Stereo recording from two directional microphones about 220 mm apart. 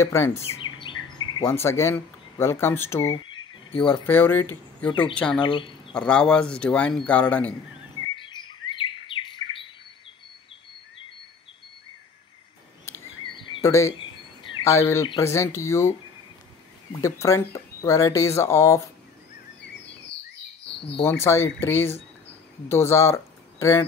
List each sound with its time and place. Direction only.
0.0 s speech: 10° left (ahead or behind)
0.3 s speech: 25° left (ahead or behind)
3.3 s cricket: 25° left (ahead or behind)
4.0 s speech: 10° left (ahead or behind)
4.8 s speech: 20° left (ahead or behind)
5.1 s speech: 5° left (ahead or behind)
5.4 s speech: 20° left (ahead or behind)
5.9 s speech: 5° left (ahead or behind)
8.2 s chirp: 20° left (ahead or behind)
8.6 s bird: 20° left (ahead or behind)
13.3 s a sound: 20° left (ahead or behind)
14.9 s speech: 15° left (ahead or behind)
17.0 s speech: 15° left (ahead or behind)
21.0 s speech: 10° left (ahead or behind)